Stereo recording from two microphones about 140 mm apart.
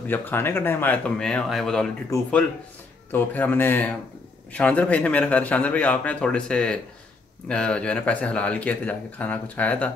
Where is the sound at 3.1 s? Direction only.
10° left (ahead or behind).